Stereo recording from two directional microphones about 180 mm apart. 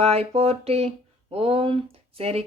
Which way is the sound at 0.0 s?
35° right (ahead or behind).